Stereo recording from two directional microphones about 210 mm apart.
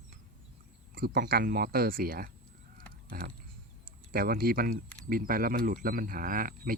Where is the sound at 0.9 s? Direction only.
45° right (ahead or behind).